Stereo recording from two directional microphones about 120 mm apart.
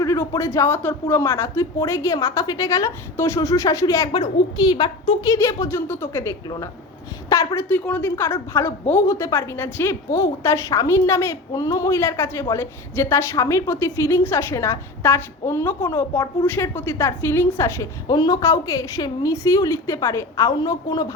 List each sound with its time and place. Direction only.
0.0 s a woman's voice: 25° left (ahead or behind)
4.1 s a woman's voice: 40° left (ahead or behind)
7.7 s a woman's voice: 15° left (ahead or behind)
18.1 s a woman's voice: 35° left (ahead or behind)